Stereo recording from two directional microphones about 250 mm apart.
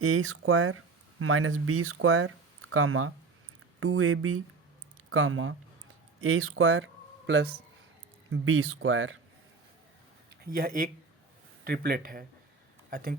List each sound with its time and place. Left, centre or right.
0.0 s speech: right
10.4 s speech: right